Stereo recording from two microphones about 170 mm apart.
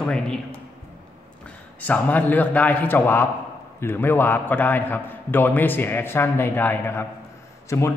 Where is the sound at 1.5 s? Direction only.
10° left (ahead or behind).